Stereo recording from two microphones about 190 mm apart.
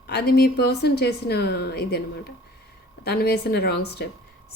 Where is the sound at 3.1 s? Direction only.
60° left (ahead or behind).